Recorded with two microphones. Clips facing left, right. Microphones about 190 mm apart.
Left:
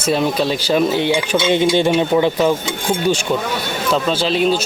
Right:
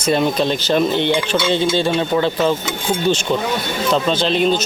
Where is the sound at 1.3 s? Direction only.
20° left (ahead or behind).